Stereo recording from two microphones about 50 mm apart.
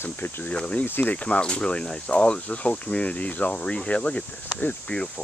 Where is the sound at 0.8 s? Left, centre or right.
Left.